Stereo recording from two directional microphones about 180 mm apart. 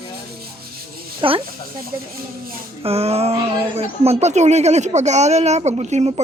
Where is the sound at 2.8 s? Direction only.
35° right (ahead or behind).